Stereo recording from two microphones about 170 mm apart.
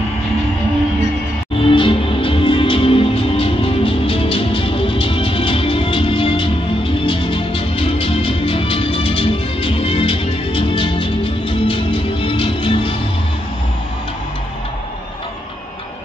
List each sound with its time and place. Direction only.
1.7 s music: 30° left (ahead or behind)